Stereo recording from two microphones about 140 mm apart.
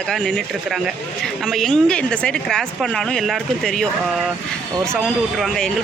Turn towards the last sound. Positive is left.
turn(degrees=0)  # may be behind; listen again after turning